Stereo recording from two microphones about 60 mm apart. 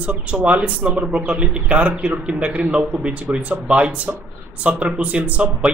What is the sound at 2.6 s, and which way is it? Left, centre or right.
Speech, centre.